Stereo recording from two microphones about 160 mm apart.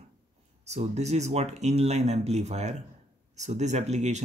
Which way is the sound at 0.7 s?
45° right (ahead or behind).